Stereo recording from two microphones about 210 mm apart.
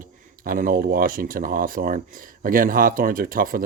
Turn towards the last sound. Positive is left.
turn(degrees=-40)  # may be behind; listen again after turning